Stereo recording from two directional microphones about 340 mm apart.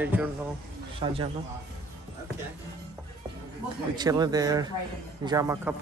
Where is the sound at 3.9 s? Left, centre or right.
Centre.